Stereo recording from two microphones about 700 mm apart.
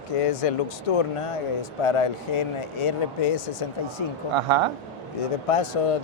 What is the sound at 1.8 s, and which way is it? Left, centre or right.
Speech, left.